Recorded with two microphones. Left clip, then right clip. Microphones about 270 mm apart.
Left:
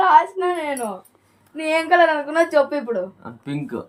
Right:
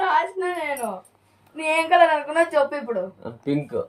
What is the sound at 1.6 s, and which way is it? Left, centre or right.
A woman's voice, centre.